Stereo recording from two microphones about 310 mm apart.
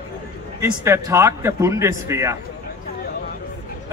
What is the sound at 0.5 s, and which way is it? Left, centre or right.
Speech, centre.